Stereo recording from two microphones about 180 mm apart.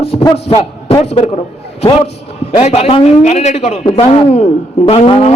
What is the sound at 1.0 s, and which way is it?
A man's voice, 35° left (ahead or behind).